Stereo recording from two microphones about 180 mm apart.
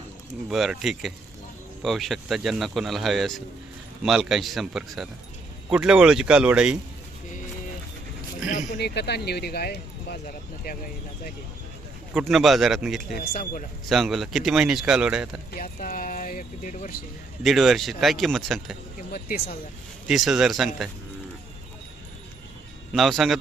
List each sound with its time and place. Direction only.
0.5 s a man's voice: centre (ahead or behind)
8.4 s speech: 45° left (ahead or behind)
8.8 s speech: 65° left (ahead or behind)
12.1 s a man's voice: centre (ahead or behind)
13.1 s speech: 55° left (ahead or behind)
13.9 s a man's voice: centre (ahead or behind)
15.5 s speech: 50° left (ahead or behind)
17.4 s a man's voice: centre (ahead or behind)
19.1 s speech: 55° left (ahead or behind)
20.1 s a man's voice: centre (ahead or behind)
22.9 s a man's voice: centre (ahead or behind)